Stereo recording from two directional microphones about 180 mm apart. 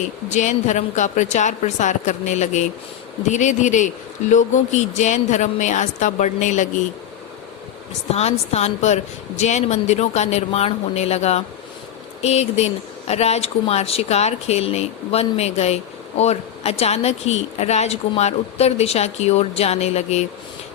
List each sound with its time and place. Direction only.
0.3 s speech: 40° left (ahead or behind)
8.1 s speech: 35° left (ahead or behind)